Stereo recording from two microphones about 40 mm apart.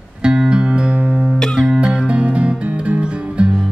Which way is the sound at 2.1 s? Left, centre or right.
Right.